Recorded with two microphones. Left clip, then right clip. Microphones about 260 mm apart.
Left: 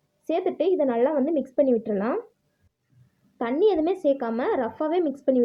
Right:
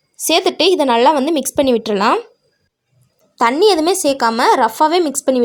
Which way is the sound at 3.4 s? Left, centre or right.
Right.